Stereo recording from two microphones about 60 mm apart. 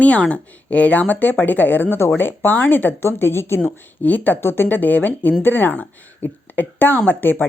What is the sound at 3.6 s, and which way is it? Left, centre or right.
Speech, left.